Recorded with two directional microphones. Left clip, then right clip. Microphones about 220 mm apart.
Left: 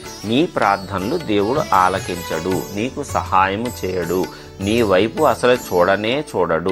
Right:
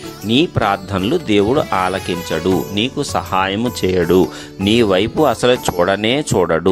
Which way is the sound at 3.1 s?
35° right (ahead or behind).